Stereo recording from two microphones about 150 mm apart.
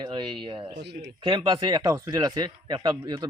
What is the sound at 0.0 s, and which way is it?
A man's voice, 30° right (ahead or behind).